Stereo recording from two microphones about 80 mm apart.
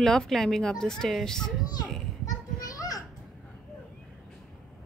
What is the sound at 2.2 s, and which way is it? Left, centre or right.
Children playing, left.